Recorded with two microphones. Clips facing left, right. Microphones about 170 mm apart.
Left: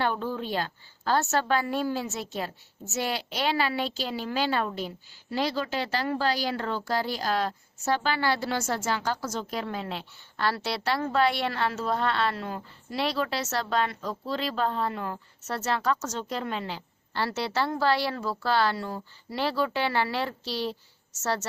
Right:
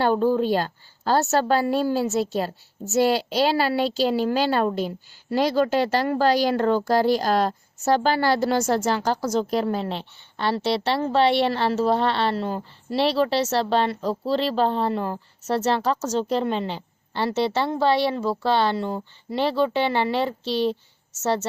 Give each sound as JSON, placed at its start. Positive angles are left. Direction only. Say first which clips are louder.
{"t": 0.0, "sound": "a woman's voice", "louder": "right 9 dB", "side_deg": -40}